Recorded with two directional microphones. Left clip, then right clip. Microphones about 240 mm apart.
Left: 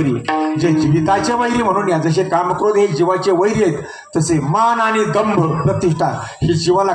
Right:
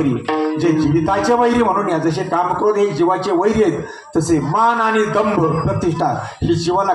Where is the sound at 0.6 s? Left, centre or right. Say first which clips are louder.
Even; left.